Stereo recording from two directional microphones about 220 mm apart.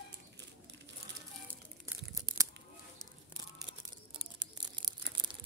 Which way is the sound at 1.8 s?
15° right (ahead or behind).